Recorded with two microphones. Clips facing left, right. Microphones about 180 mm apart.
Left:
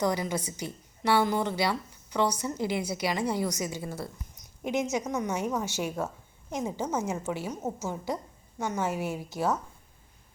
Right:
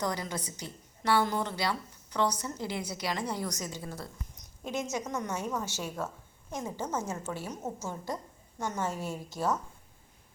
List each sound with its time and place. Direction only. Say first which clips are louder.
0.0 s a woman's voice: left 5 dB; 10° left (ahead or behind)